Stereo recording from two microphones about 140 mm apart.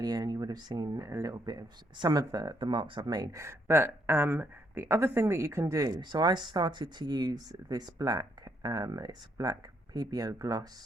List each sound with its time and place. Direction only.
0.0 s speech: 30° right (ahead or behind)